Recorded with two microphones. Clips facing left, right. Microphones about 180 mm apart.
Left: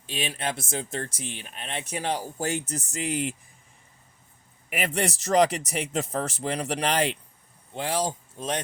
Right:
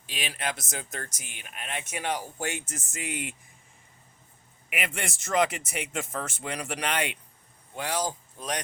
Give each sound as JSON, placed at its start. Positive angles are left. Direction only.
{"t": 0.0, "sound": "speech", "side_deg": 25}
{"t": 4.7, "sound": "speech", "side_deg": 35}